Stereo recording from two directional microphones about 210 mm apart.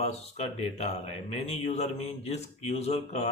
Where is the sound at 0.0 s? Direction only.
30° left (ahead or behind).